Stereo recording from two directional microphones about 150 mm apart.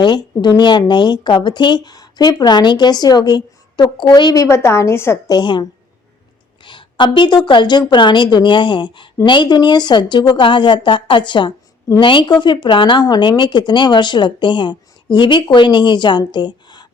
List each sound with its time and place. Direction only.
0.0 s speech: 30° left (ahead or behind)
5.4 s a woman's voice: 30° left (ahead or behind)